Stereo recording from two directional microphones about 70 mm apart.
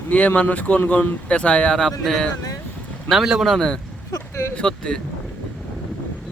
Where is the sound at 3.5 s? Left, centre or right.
Centre.